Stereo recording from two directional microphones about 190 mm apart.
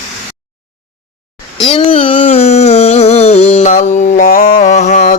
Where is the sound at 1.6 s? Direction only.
30° left (ahead or behind).